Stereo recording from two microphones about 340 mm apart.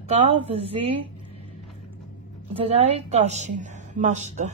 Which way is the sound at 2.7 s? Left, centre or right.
Centre.